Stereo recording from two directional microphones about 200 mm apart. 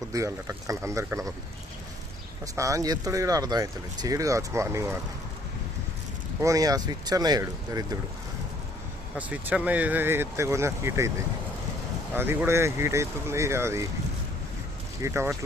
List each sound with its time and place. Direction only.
0.1 s speech: 15° right (ahead or behind)
2.6 s speech: 15° right (ahead or behind)
6.4 s speech: 15° right (ahead or behind)
9.1 s speech: 5° right (ahead or behind)
12.1 s speech: 10° right (ahead or behind)
15.0 s speech: 15° right (ahead or behind)